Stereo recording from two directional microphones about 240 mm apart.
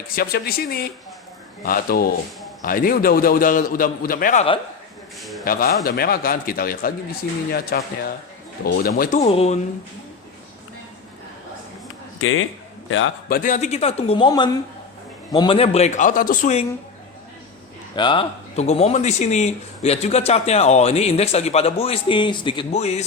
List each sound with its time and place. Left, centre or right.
0.1 s a man's voice: left
5.2 s a man's voice: centre
5.5 s a man's voice: left
12.2 s a man's voice: left
13.3 s speech: left
17.9 s speech: centre